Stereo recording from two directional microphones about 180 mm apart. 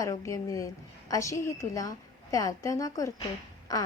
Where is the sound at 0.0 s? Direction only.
15° left (ahead or behind).